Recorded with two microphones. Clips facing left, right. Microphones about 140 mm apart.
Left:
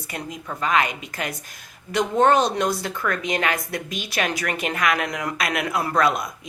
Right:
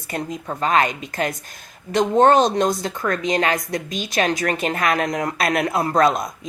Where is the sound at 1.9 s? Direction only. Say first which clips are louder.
Right 4 dB; 25° right (ahead or behind).